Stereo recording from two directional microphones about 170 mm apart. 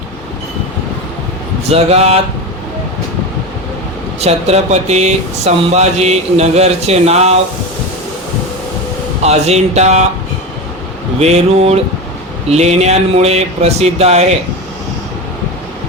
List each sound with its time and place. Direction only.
1.7 s speech: 40° right (ahead or behind)
4.2 s speech: 40° right (ahead or behind)
9.2 s speech: 40° right (ahead or behind)
11.2 s speech: 40° right (ahead or behind)